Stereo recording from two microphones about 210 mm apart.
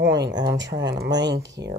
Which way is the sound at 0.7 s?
55° right (ahead or behind).